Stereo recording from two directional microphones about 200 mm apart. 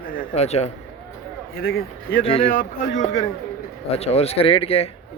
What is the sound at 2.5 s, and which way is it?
A man's voice, 40° left (ahead or behind).